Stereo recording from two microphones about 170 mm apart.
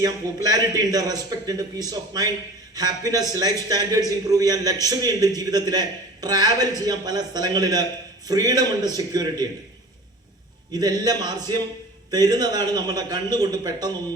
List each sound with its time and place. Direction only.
0.0 s a man's voice: 20° right (ahead or behind)
10.7 s a man's voice: 25° right (ahead or behind)